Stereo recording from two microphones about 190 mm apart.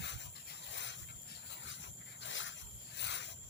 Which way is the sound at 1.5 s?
75° left (ahead or behind).